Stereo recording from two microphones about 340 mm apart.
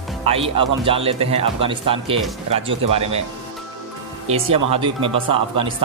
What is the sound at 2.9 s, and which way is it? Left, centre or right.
Speech, centre.